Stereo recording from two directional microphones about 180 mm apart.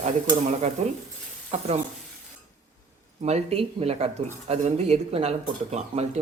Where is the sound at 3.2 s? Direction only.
35° right (ahead or behind).